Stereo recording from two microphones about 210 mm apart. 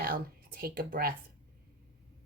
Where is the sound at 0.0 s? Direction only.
45° right (ahead or behind).